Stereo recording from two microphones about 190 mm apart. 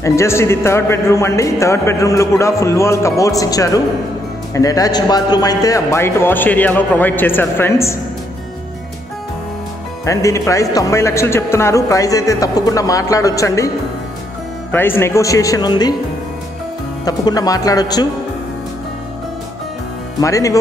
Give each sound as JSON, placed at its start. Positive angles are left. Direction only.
{"t": 0.0, "sound": "a man's voice", "side_deg": 15}
{"t": 10.0, "sound": "a man's voice", "side_deg": 15}
{"t": 14.7, "sound": "a man's voice", "side_deg": 10}
{"t": 17.0, "sound": "speech", "side_deg": 20}
{"t": 20.2, "sound": "a man's voice", "side_deg": 15}